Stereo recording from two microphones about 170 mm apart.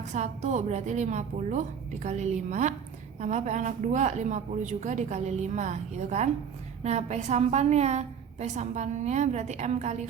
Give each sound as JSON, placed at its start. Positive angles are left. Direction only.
{"t": 0.0, "sound": "a woman's voice", "side_deg": -45}